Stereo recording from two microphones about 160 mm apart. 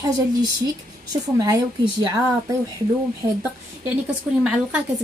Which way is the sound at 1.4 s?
25° right (ahead or behind).